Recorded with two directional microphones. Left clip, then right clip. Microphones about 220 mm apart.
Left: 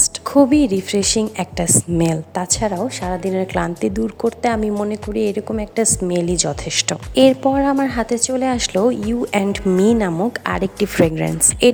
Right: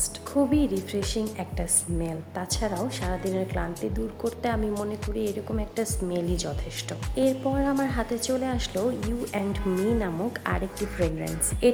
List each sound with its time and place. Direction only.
0.0 s a woman's voice: 40° left (ahead or behind)